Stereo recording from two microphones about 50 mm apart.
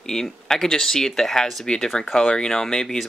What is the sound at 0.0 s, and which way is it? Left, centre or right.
Speech, centre.